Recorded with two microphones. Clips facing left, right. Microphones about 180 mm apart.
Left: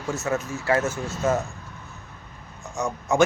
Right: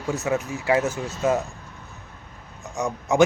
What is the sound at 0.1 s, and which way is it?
Speech, 15° right (ahead or behind).